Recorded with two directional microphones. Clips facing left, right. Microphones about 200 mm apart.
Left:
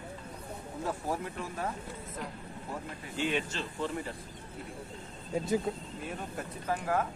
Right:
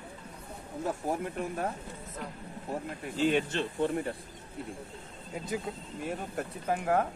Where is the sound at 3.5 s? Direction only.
55° right (ahead or behind).